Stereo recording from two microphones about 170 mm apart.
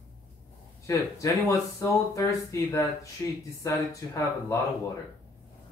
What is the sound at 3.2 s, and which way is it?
Speech, 15° left (ahead or behind).